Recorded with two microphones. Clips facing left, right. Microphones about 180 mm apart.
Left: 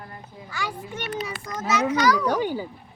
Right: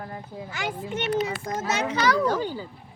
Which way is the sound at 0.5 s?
20° right (ahead or behind).